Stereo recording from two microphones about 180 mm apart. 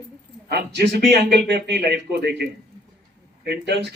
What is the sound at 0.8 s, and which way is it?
Speech, 70° right (ahead or behind).